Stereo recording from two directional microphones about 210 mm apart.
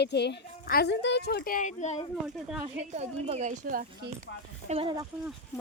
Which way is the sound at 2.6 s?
30° right (ahead or behind).